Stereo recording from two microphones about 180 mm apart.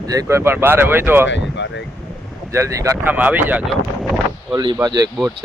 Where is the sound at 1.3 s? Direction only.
80° left.